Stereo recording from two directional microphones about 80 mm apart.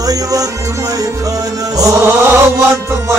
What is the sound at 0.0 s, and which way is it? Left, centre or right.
Music, right.